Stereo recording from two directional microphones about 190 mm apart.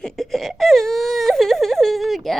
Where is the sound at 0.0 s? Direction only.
Centre (ahead or behind).